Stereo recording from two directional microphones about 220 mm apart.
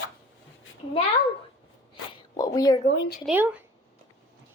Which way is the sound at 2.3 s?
15° left (ahead or behind).